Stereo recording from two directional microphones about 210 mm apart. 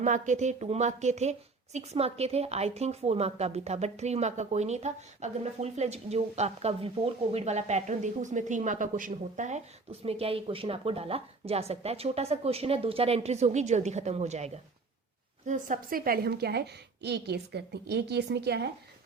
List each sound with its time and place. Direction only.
0.0 s a woman's voice: 35° right (ahead or behind); by 18.7 s 50° right (ahead or behind)